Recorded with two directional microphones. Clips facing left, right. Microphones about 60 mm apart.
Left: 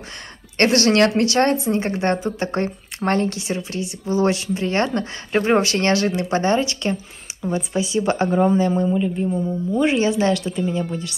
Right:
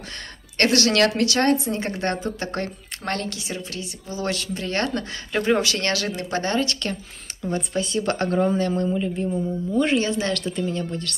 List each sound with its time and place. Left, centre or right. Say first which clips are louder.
0.6 s a man's voice: left 3 dB; left
10.3 s a woman's voice: left 3 dB; centre